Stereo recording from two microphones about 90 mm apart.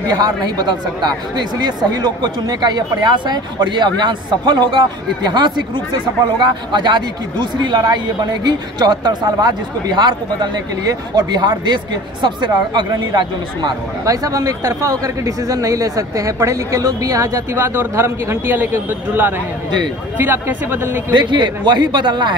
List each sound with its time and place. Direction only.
0.1 s speech: 50° right (ahead or behind)
14.0 s speech: 40° right (ahead or behind)
17.7 s a man's voice: 25° right (ahead or behind)
21.1 s a man's voice: 60° right (ahead or behind)